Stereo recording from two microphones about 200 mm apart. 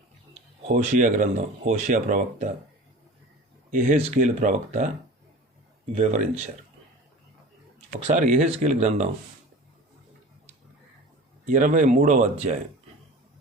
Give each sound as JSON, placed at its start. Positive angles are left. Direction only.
{"t": 0.7, "sound": "speech", "side_deg": -40}
{"t": 3.7, "sound": "speech", "side_deg": -40}
{"t": 7.9, "sound": "speech", "side_deg": -35}
{"t": 11.4, "sound": "speech", "side_deg": -40}